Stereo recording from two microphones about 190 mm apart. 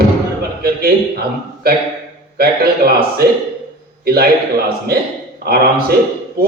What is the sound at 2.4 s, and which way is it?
Speech, 55° right (ahead or behind).